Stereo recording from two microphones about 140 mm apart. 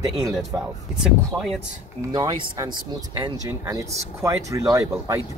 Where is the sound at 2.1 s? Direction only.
30° right (ahead or behind).